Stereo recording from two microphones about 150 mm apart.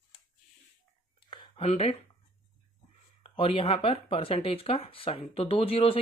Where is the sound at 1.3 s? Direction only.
40° left (ahead or behind).